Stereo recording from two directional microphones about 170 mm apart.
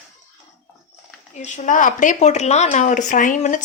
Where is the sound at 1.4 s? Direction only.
45° left (ahead or behind).